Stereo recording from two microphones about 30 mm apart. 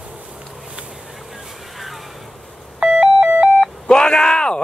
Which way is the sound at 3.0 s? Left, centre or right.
Right.